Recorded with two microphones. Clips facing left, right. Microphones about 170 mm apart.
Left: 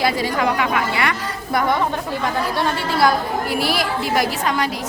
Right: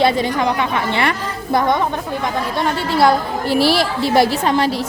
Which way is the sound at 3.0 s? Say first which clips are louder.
Right 3 dB; 25° right (ahead or behind).